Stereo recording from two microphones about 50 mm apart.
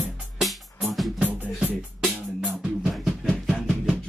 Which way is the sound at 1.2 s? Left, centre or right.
Right.